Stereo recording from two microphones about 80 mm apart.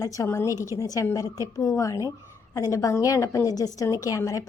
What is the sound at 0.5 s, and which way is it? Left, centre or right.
Speech, right.